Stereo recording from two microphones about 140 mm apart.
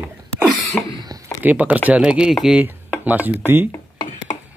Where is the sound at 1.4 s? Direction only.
10° right (ahead or behind).